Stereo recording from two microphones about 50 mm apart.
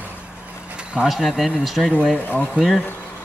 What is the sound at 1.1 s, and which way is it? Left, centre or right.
Speech, centre.